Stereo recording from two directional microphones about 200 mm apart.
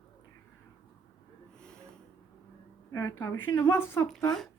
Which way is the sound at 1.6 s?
5° left (ahead or behind).